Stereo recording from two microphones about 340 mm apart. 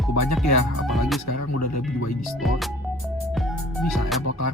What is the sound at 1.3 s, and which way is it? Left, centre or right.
Speech, left.